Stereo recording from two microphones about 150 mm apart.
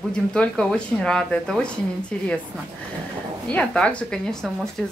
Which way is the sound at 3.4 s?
10° left (ahead or behind).